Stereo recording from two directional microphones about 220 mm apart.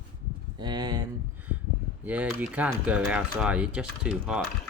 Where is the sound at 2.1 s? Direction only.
5° right (ahead or behind).